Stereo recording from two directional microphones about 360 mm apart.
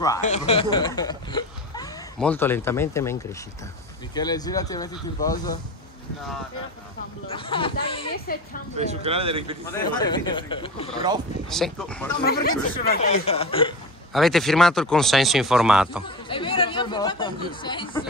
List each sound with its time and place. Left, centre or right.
0.2 s speech: centre
7.2 s speech: centre
8.7 s speech: centre
9.7 s speech: centre
11.5 s speech: centre
12.2 s speech: left
14.1 s speech: centre
16.3 s speech: centre